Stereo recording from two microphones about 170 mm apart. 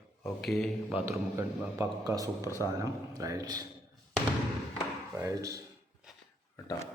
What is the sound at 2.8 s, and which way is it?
Speech, 20° right (ahead or behind).